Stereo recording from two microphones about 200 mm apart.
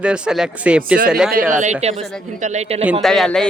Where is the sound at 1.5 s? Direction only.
40° right (ahead or behind).